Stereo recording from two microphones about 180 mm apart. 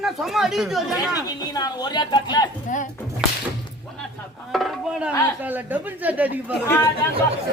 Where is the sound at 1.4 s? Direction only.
20° left (ahead or behind).